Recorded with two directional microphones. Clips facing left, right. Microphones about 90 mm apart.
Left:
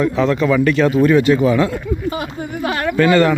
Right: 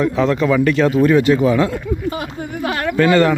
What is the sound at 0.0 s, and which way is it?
Speech, 35° right (ahead or behind).